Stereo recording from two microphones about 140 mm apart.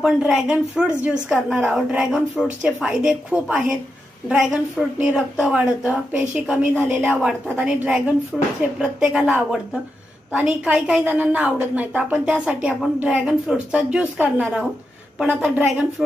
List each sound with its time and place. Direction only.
0.0 s a woman's voice: 5° right (ahead or behind)